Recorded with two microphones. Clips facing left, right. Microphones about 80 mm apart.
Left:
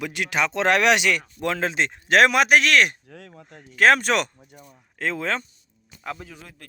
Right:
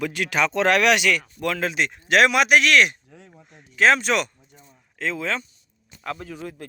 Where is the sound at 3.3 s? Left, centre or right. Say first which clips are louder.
Left 5 dB; left.